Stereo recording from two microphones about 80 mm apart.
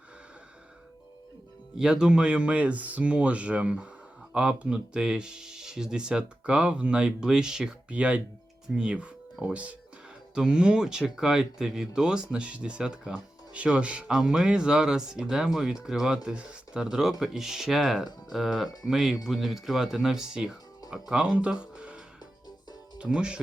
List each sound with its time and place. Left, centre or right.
1.7 s speech: centre